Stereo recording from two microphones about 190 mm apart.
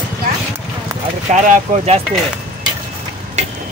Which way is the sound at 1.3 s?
35° right (ahead or behind).